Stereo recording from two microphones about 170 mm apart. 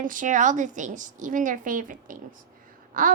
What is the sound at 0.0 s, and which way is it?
A woman's voice, 50° right (ahead or behind).